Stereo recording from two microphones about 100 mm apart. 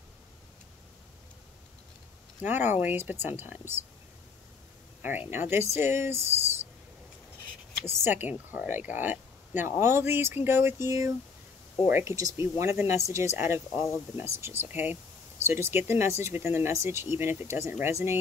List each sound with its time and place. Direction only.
2.4 s speech: 20° right (ahead or behind)
5.3 s speech: 20° right (ahead or behind)
8.0 s speech: 20° right (ahead or behind)